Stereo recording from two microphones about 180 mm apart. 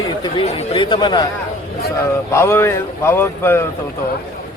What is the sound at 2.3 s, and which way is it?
Speech, 15° left (ahead or behind).